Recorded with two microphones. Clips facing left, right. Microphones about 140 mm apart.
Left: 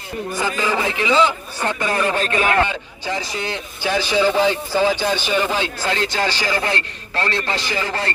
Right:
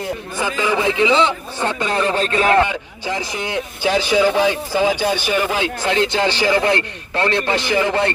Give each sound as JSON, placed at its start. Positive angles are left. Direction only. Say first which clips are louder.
{"t": 0.4, "sound": "a man's voice", "louder": "right 4 dB", "side_deg": -15}